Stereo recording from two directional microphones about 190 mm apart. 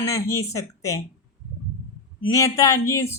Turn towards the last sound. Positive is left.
turn(degrees=15)  # may be behind; listen again after turning